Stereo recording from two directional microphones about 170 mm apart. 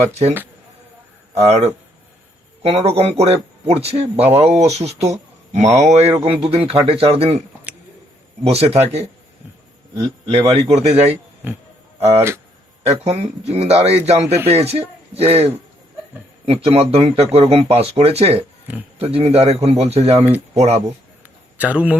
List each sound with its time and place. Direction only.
0.1 s speech: 40° right (ahead or behind)
7.3 s a sound: 10° right (ahead or behind)
8.4 s speech: 35° right (ahead or behind)
21.6 s speech: 10° right (ahead or behind)